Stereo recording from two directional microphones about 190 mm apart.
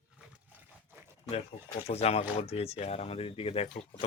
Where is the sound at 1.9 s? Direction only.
35° left (ahead or behind).